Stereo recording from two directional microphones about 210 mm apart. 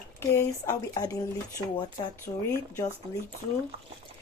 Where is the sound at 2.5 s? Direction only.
10° left (ahead or behind).